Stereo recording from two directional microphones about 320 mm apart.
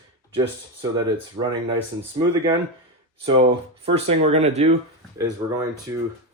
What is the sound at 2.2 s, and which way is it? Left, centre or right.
Speech, centre.